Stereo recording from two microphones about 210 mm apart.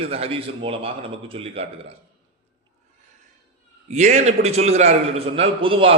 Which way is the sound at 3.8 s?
35° right (ahead or behind).